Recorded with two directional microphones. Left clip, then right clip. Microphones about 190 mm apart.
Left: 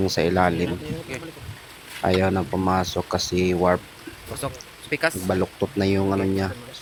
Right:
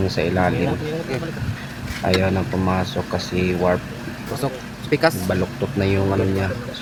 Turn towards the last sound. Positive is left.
turn(degrees=30)  # may be behind; listen again after turning